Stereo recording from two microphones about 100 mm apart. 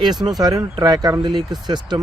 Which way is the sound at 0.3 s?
40° right (ahead or behind).